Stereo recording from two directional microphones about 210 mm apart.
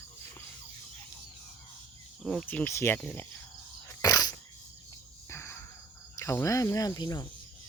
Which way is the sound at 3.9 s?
15° left (ahead or behind).